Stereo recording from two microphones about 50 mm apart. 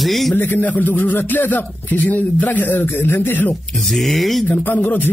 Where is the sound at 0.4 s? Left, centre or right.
Left.